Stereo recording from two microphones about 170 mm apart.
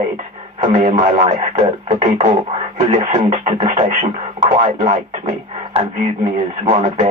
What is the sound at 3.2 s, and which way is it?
Speech, 40° right (ahead or behind).